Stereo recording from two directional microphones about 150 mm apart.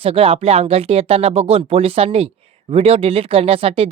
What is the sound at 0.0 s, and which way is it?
Speech, 40° right (ahead or behind).